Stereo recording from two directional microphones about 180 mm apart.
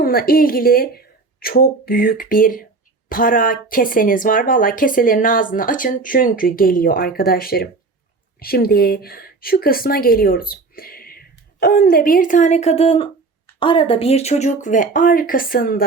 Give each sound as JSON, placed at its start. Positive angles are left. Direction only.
{"t": 0.0, "sound": "speech", "side_deg": 55}